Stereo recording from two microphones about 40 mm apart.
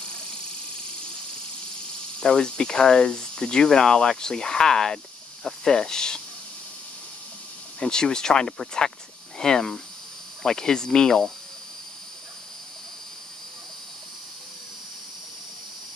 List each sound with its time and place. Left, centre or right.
2.1 s speech: left
7.8 s speech: centre